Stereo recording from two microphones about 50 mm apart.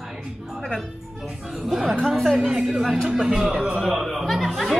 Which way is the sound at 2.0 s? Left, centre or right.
Centre.